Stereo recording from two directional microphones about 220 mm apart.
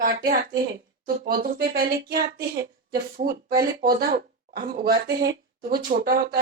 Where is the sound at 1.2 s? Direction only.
40° right (ahead or behind).